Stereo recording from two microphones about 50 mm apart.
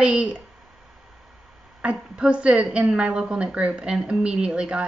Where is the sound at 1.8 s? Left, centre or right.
Right.